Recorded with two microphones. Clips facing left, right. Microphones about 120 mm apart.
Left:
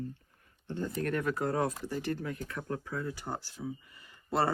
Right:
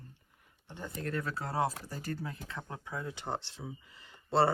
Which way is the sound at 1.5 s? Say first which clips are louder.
Left 2 dB; 30° right (ahead or behind).